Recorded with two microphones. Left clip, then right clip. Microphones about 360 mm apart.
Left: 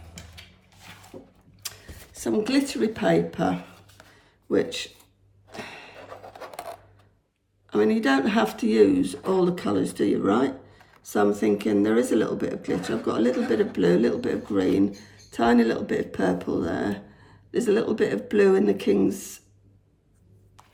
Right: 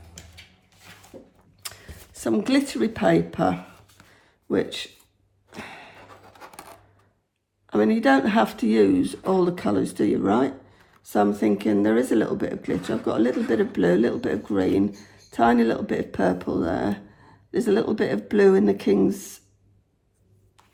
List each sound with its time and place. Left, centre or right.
1.6 s speech: centre
4.2 s a sound: centre
7.7 s speech: centre